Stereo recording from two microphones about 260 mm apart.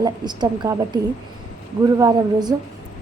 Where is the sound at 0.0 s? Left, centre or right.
Centre.